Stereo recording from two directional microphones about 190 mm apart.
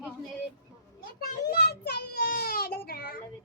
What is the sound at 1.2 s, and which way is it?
A child's voice, 55° left (ahead or behind).